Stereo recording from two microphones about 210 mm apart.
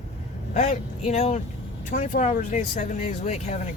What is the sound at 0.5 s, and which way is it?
Speech, 35° left (ahead or behind).